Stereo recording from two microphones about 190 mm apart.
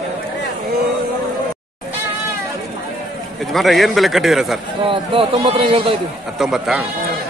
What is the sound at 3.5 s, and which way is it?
A man's voice, centre (ahead or behind).